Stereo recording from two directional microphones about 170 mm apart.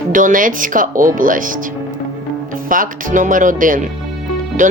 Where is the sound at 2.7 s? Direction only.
50° right (ahead or behind).